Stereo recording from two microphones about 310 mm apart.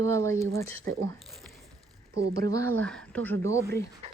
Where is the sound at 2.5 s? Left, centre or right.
Centre.